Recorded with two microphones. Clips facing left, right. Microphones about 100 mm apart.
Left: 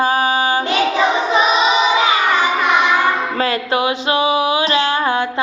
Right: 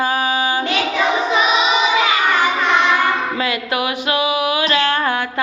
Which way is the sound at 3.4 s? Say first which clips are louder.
Left 3 dB; 35° left (ahead or behind).